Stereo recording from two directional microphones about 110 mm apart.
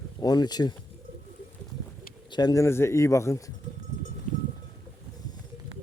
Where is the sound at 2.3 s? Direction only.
35° left (ahead or behind).